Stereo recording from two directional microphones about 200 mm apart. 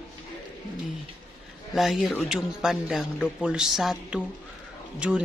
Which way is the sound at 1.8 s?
Centre (ahead or behind).